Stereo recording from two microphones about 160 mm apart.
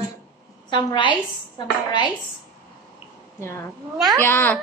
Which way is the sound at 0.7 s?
30° left (ahead or behind).